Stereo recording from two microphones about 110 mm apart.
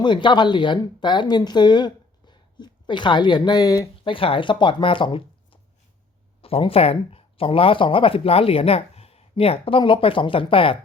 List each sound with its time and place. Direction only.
0.0 s speech: 45° left (ahead or behind)
4.0 s speech: 55° left (ahead or behind)